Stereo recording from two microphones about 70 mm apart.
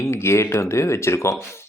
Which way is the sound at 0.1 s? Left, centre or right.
Left.